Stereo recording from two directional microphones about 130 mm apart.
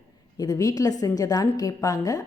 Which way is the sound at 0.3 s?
30° left (ahead or behind).